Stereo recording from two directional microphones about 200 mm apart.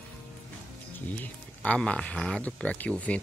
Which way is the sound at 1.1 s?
5° left (ahead or behind).